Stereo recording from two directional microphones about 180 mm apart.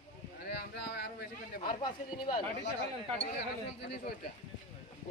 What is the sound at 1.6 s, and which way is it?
Speech, 25° left (ahead or behind).